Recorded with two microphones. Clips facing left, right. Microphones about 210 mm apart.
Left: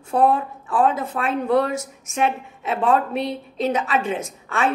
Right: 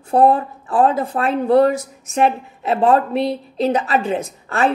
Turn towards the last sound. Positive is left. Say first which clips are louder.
# right 4 dB
turn(degrees=-35)  # may be behind; listen again after turning